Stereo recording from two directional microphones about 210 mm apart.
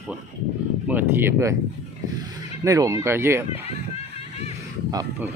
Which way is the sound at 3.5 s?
30° left (ahead or behind).